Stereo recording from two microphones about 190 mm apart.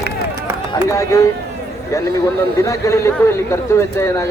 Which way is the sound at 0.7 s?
15° left (ahead or behind).